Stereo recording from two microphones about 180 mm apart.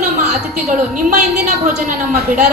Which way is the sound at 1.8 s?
50° right (ahead or behind).